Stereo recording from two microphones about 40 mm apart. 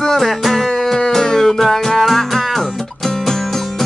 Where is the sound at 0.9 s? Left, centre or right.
Centre.